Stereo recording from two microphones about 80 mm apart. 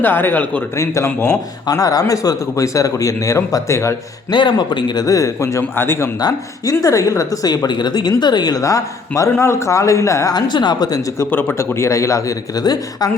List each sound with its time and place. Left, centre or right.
0.0 s a man's voice: left
0.8 s a man's voice: left
1.7 s speech: left
4.3 s speech: left
5.0 s a man's voice: left
5.7 s a man's voice: left
6.1 s a man's voice: left
10.3 s speech: left
11.2 s a man's voice: left